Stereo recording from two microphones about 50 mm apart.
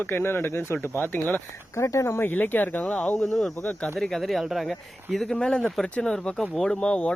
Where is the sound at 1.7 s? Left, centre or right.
Left.